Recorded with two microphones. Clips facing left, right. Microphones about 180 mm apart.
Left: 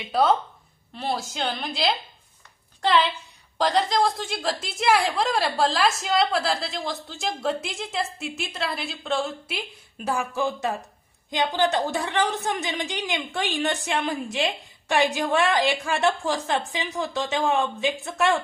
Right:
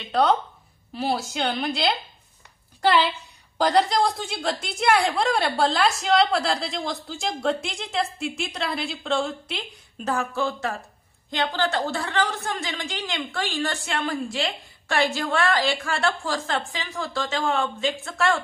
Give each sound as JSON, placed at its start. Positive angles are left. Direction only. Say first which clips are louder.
{"t": 0.0, "sound": "a woman's voice", "louder": "even", "side_deg": 5}